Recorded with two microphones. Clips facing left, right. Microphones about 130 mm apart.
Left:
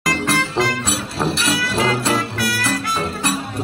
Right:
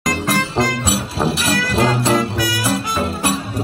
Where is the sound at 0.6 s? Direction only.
Centre (ahead or behind).